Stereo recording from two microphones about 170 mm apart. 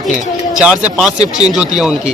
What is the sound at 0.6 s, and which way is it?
Speech, 5° right (ahead or behind).